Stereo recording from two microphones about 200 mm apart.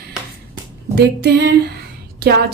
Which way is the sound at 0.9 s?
55° right (ahead or behind).